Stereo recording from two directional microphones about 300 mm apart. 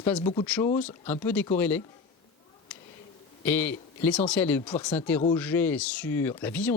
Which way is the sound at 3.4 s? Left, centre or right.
Centre.